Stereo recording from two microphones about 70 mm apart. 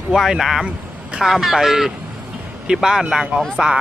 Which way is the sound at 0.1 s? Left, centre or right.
Centre.